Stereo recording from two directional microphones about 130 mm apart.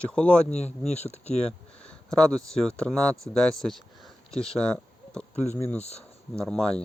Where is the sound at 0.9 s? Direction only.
55° left (ahead or behind).